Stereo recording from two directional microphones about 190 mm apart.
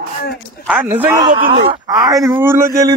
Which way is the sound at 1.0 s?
20° right (ahead or behind).